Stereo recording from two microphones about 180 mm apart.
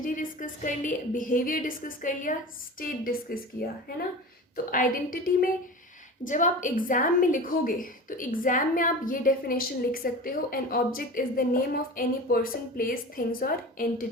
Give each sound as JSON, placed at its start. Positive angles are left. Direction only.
{"t": 0.0, "sound": "a woman's voice", "side_deg": 50}